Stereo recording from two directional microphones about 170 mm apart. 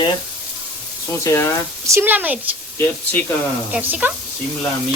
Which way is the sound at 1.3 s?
20° left (ahead or behind).